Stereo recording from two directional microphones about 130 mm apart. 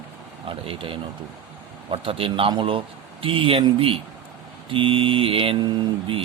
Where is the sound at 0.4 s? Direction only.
45° right (ahead or behind).